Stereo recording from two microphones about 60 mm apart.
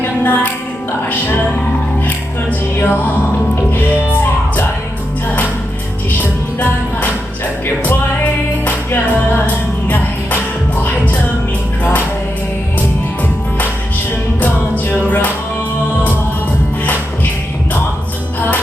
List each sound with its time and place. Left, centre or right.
0.0 s music: left
2.0 s music: left
7.9 s music: left